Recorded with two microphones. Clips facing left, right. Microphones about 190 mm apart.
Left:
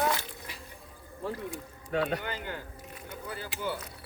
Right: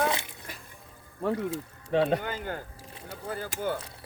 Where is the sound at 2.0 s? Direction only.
45° right (ahead or behind).